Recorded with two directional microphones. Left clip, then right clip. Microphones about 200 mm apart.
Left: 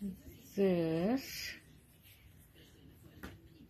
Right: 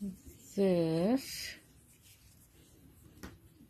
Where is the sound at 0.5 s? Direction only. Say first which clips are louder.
Right 2 dB; 20° right (ahead or behind).